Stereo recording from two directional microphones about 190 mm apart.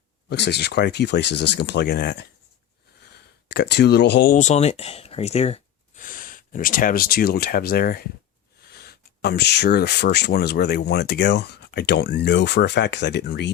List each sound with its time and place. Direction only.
0.3 s speech: 60° left (ahead or behind)
3.5 s speech: 60° left (ahead or behind)
4.4 s speech: 35° left (ahead or behind)
6.0 s speech: 45° left (ahead or behind); by 13.5 s 65° left (ahead or behind)